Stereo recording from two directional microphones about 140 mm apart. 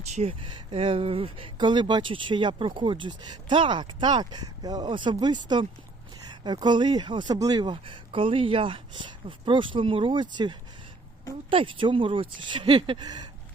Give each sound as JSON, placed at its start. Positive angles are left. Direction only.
{"t": 0.1, "sound": "speech", "side_deg": -50}
{"t": 0.5, "sound": "speech", "side_deg": -40}
{"t": 11.5, "sound": "speech", "side_deg": -35}